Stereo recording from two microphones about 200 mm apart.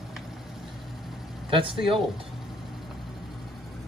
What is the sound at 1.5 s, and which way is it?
Speech, 25° right (ahead or behind).